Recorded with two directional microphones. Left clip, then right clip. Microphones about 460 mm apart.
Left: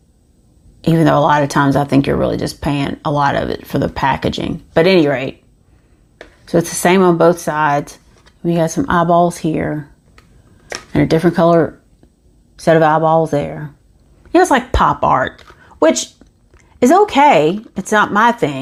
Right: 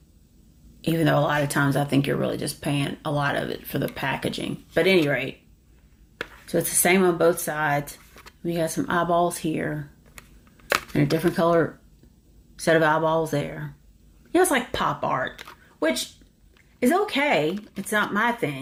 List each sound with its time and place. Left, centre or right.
0.8 s speech: left
6.4 s speech: left
10.9 s speech: left
16.8 s speech: left